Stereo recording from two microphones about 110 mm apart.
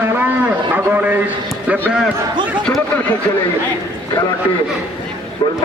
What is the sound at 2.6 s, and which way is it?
Speech, 10° left (ahead or behind).